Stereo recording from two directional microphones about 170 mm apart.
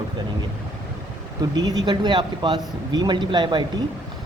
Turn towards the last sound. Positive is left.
turn(degrees=-25)  # may be behind; listen again after turning